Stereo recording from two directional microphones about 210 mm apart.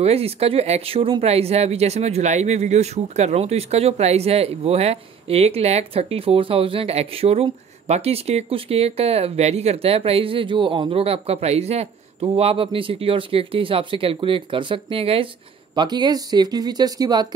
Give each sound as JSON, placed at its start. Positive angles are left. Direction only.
{"t": 0.0, "sound": "speech", "side_deg": -30}